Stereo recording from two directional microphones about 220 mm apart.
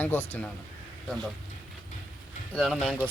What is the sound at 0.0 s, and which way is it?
Speech, 10° left (ahead or behind).